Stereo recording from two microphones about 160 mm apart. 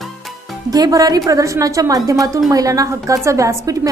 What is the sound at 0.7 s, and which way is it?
A woman's voice, 25° right (ahead or behind).